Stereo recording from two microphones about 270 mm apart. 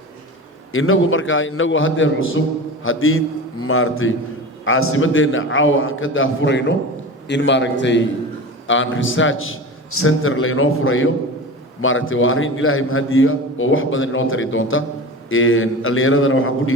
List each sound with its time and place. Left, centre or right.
0.7 s a man's voice: left